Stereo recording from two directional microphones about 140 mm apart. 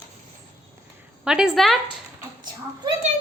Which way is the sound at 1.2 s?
5° right (ahead or behind).